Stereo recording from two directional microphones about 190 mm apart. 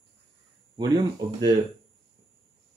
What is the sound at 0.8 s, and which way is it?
Speech, 20° right (ahead or behind).